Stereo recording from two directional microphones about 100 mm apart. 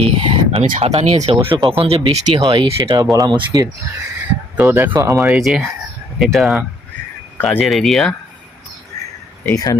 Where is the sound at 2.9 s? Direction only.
35° right (ahead or behind).